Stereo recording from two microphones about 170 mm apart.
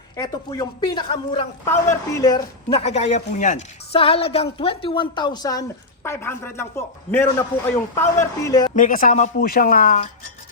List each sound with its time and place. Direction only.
0.2 s a woman's voice: 25° left (ahead or behind)
1.6 s a man's voice: 15° left (ahead or behind); by 4.0 s 45° left (ahead or behind)
4.0 s a woman's voice: 35° left (ahead or behind)
8.7 s speech: 50° left (ahead or behind)